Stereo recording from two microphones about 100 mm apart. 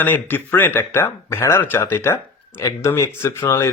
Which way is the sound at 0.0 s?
20° left (ahead or behind).